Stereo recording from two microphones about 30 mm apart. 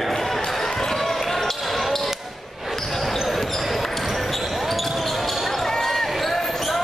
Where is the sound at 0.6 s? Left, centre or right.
Centre.